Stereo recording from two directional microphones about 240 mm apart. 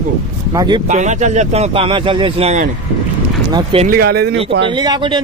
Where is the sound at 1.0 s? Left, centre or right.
Right.